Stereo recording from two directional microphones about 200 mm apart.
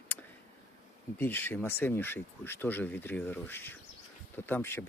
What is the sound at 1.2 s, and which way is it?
Speech, 10° left (ahead or behind).